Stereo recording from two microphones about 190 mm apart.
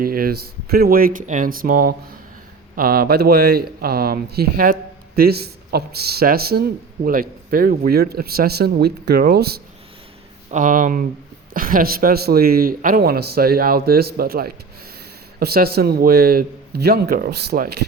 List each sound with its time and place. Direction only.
0.0 s a man's voice: 50° right (ahead or behind)
10.5 s a man's voice: 45° right (ahead or behind)